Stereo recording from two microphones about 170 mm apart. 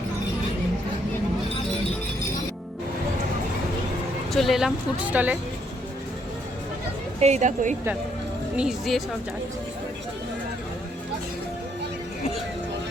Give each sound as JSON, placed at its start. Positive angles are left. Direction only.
{"t": 4.3, "sound": "a woman's voice", "side_deg": 0}
{"t": 7.2, "sound": "speech", "side_deg": -40}
{"t": 8.5, "sound": "speech", "side_deg": 0}